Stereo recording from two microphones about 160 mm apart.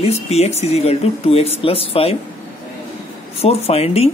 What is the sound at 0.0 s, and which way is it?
Speech, 40° left (ahead or behind).